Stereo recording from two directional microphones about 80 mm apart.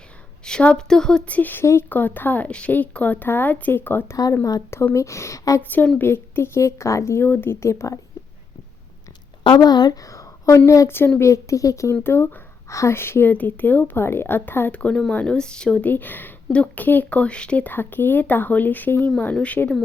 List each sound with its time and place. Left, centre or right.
0.4 s speech: centre
4.9 s a woman's voice: left
5.6 s a woman's voice: left
9.4 s speech: left
10.0 s a sound: left
10.7 s a woman's voice: left
12.0 s speech: left
14.7 s speech: centre
15.9 s speech: left
17.7 s speech: left